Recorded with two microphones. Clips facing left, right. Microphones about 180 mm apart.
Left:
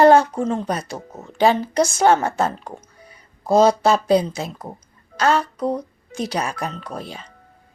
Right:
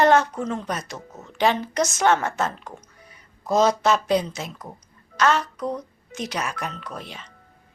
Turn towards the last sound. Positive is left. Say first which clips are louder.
# left 4 dB
turn(degrees=35)  # may be behind; listen again after turning